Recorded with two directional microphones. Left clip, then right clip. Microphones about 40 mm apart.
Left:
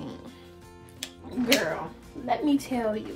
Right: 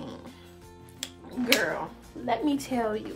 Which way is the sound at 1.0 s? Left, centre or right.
Right.